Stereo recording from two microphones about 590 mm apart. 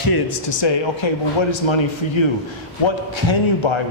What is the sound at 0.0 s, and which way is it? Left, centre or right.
A man's voice, left.